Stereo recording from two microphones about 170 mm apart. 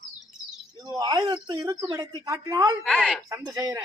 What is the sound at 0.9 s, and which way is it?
A man's voice, 25° right (ahead or behind).